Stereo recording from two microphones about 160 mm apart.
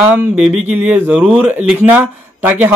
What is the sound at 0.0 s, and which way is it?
Speech, 10° right (ahead or behind).